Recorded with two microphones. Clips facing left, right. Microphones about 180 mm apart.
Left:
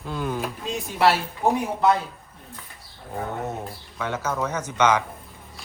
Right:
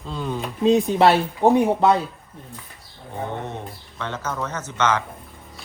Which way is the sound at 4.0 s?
10° left (ahead or behind).